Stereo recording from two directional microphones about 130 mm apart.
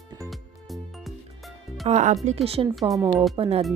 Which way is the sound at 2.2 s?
50° right (ahead or behind).